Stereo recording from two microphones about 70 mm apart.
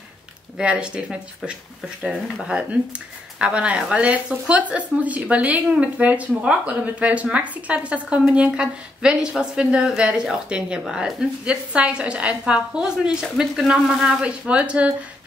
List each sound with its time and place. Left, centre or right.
0.6 s a woman's voice: centre
14.5 s a woman's voice: centre